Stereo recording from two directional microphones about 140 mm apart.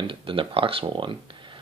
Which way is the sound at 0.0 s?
40° right (ahead or behind).